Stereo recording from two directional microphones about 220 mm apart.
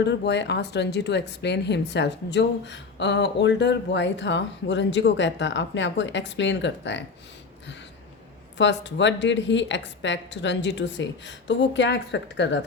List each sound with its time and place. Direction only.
0.0 s a woman's voice: 50° left (ahead or behind)
8.5 s a woman's voice: 55° left (ahead or behind)